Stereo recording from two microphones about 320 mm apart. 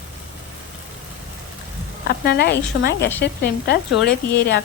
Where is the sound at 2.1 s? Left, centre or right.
Left.